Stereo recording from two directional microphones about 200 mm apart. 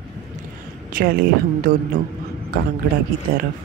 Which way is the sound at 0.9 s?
40° right (ahead or behind).